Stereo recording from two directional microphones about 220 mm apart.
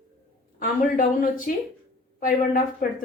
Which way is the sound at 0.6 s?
40° left (ahead or behind).